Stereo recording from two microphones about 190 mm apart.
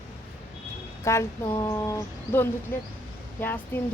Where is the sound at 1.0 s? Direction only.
15° left (ahead or behind).